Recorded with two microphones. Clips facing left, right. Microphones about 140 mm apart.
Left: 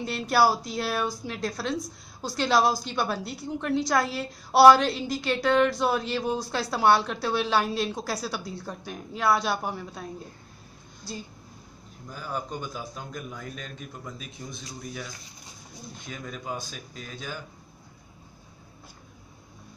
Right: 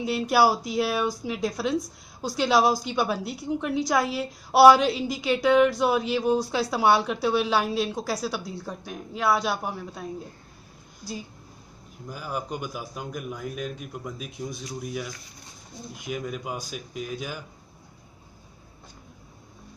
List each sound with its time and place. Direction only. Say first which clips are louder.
0.0 s a woman's voice: right 2 dB; 10° right (ahead or behind)
12.1 s a woman's voice: right 2 dB; 10° right (ahead or behind)
16.0 s a woman's voice: right 7 dB; 10° right (ahead or behind)